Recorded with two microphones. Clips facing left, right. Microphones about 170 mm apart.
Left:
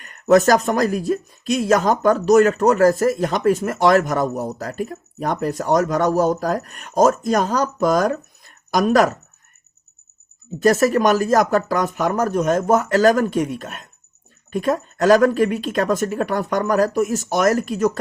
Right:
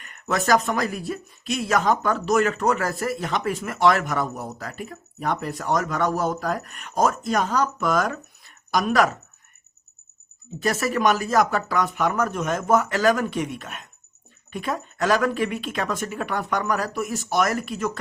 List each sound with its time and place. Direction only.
0.0 s speech: 40° left (ahead or behind)
10.6 s speech: 45° left (ahead or behind)